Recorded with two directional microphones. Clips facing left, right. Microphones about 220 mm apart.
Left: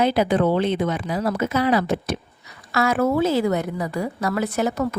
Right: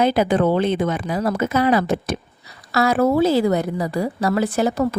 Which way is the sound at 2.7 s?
35° right (ahead or behind).